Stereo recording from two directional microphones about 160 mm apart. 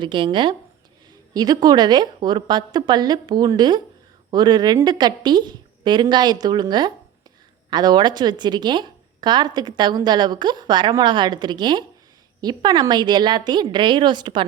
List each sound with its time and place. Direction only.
0.0 s a woman's voice: 30° right (ahead or behind)